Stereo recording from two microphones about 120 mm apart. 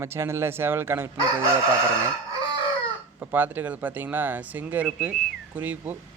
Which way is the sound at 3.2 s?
15° right (ahead or behind).